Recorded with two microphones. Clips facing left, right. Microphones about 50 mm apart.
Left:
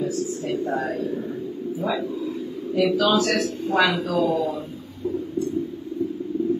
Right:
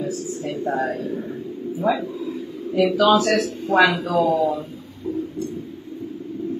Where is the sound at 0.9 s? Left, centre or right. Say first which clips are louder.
Even; right.